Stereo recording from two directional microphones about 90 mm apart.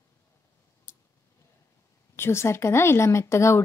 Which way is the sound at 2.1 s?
30° left (ahead or behind).